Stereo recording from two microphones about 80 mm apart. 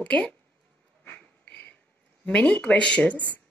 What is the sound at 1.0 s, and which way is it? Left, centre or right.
Insect, left.